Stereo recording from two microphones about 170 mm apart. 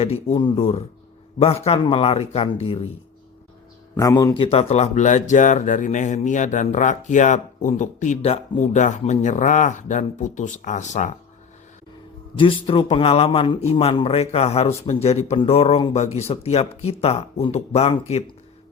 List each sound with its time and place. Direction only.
0.0 s speech: 35° left (ahead or behind)
3.9 s a man's voice: 20° left (ahead or behind)
4.5 s speech: 40° left (ahead or behind)
12.4 s speech: 30° left (ahead or behind)